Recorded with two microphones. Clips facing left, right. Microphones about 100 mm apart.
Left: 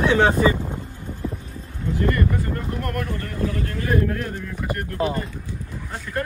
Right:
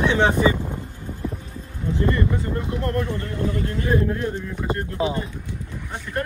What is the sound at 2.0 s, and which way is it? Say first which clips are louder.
Boat: even; 20° right (ahead or behind).